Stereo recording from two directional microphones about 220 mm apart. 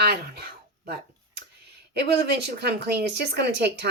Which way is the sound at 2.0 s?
50° right (ahead or behind).